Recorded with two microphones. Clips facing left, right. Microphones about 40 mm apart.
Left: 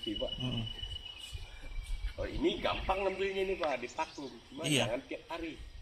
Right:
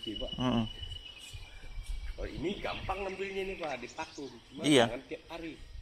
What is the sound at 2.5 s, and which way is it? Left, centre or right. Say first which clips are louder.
Speech: left 4 dB; left.